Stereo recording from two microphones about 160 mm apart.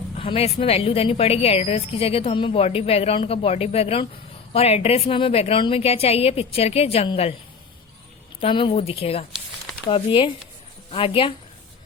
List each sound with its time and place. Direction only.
0.2 s a woman's voice: 35° left (ahead or behind)
8.4 s a woman's voice: 35° left (ahead or behind)